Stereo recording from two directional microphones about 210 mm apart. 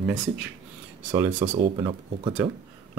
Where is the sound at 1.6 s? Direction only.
25° right (ahead or behind).